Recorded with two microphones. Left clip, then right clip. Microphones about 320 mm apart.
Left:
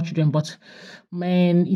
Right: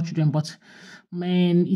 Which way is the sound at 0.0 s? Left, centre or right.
Centre.